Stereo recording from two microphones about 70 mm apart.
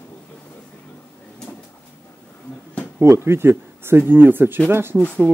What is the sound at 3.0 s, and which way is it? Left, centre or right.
Speech, right.